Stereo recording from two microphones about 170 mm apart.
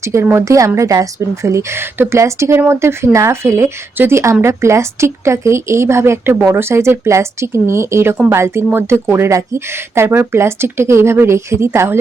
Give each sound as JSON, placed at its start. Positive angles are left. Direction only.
{"t": 0.0, "sound": "speech", "side_deg": -15}